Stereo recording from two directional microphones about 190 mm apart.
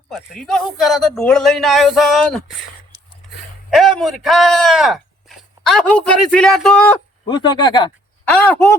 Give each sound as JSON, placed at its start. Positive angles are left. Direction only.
{"t": 0.1, "sound": "a man's voice", "side_deg": 5}
{"t": 3.7, "sound": "speech", "side_deg": 0}
{"t": 7.3, "sound": "speech", "side_deg": 25}
{"t": 8.2, "sound": "speech", "side_deg": 10}